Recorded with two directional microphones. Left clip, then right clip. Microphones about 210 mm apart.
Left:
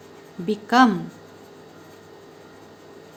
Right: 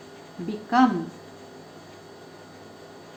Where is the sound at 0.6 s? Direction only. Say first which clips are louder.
Left 4 dB; 55° left (ahead or behind).